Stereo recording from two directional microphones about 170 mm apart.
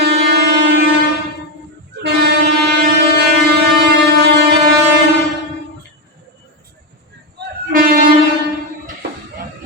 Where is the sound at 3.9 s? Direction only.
85° right.